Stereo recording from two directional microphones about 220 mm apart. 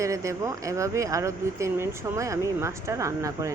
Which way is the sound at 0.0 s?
15° right (ahead or behind).